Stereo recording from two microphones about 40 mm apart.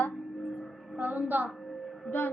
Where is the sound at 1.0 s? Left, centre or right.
Right.